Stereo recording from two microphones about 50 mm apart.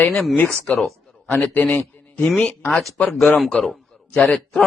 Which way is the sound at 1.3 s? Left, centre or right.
Left.